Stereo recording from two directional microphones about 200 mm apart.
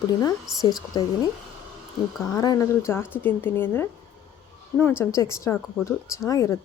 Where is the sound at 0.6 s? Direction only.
20° left (ahead or behind).